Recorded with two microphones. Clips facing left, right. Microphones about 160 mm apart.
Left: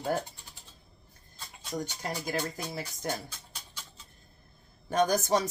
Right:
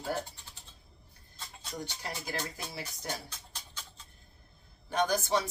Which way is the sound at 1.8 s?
45° left (ahead or behind).